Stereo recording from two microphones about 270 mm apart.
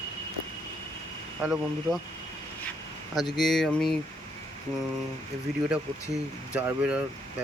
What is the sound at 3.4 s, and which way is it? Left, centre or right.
Speech, centre.